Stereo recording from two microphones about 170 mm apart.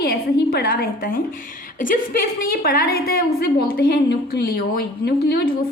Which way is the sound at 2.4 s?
65° left (ahead or behind).